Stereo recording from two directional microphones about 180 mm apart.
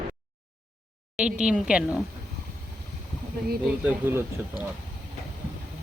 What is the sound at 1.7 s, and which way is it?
Speech, 5° right (ahead or behind).